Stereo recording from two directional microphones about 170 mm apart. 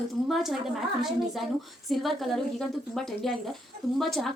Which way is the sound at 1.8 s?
Centre (ahead or behind).